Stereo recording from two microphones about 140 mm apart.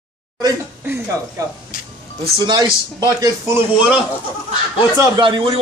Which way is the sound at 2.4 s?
30° right (ahead or behind).